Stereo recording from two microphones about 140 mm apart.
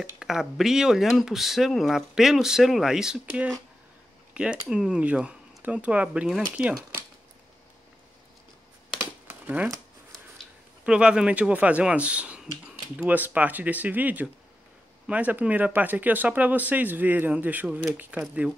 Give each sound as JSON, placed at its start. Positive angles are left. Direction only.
{"t": 0.2, "sound": "speech", "side_deg": -5}
{"t": 4.3, "sound": "a sound", "side_deg": -5}
{"t": 4.6, "sound": "speech", "side_deg": -5}
{"t": 9.3, "sound": "shuffling cards", "side_deg": -10}
{"t": 10.8, "sound": "speech", "side_deg": -5}